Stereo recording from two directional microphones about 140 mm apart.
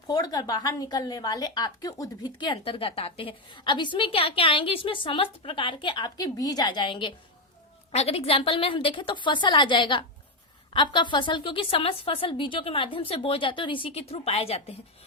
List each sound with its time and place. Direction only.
0.1 s a woman's voice: 25° left (ahead or behind)
7.9 s a woman's voice: 45° left (ahead or behind)